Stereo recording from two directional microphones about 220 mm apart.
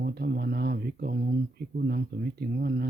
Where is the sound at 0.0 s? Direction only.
45° right (ahead or behind).